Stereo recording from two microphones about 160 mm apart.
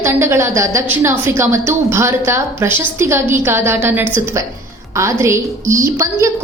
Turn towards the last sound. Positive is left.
turn(degrees=-20)  # may be behind; listen again after turning